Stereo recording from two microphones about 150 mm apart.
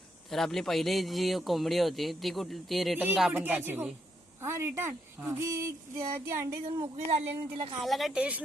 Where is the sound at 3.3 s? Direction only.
15° right (ahead or behind).